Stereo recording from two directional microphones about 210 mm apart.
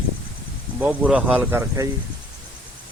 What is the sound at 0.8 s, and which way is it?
Speech, 5° right (ahead or behind).